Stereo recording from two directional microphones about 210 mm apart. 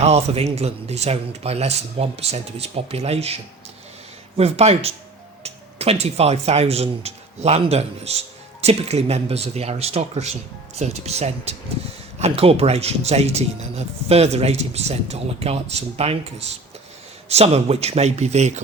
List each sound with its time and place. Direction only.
0.0 s speech: 30° right (ahead or behind)
4.4 s speech: 30° right (ahead or behind)
17.2 s speech: 30° right (ahead or behind)